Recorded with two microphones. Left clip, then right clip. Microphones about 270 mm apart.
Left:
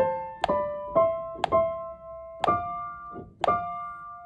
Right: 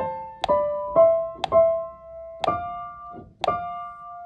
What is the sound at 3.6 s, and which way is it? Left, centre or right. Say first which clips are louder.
Music: right 2 dB; left.